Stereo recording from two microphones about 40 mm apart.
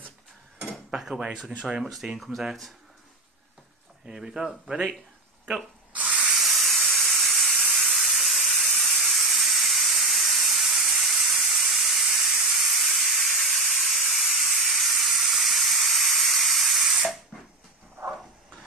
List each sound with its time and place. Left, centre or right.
0.9 s speech: centre
4.0 s speech: centre
6.3 s steam: centre